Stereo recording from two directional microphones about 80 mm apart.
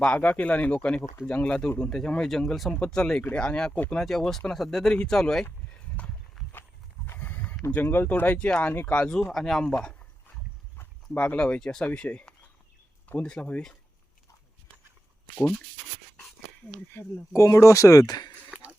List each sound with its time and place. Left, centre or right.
0.0 s speech: centre
4.0 s speech: centre
6.5 s horse: left
7.7 s speech: left
8.4 s speech: centre
9.1 s speech: centre
11.2 s speech: centre
16.9 s speech: left
18.0 s speech: left
18.5 s a sound: centre